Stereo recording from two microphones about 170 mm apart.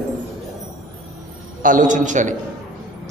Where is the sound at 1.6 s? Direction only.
50° right (ahead or behind).